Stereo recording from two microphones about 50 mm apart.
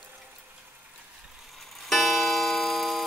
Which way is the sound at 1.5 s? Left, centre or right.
Centre.